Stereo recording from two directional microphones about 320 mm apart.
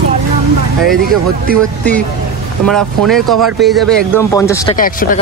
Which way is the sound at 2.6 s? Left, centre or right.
Centre.